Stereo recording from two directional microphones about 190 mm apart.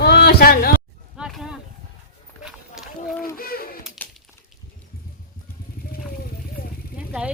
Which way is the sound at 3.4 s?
50° left (ahead or behind).